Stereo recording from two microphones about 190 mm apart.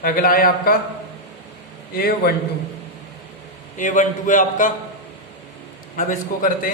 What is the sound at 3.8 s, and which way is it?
Speech, 40° left (ahead or behind).